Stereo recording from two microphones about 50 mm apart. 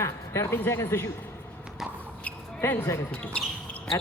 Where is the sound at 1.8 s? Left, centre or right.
Centre.